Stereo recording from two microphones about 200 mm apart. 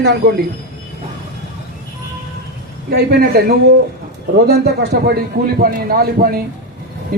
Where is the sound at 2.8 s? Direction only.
50° right (ahead or behind).